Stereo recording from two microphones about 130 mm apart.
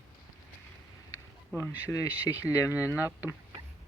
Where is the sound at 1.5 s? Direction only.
15° right (ahead or behind).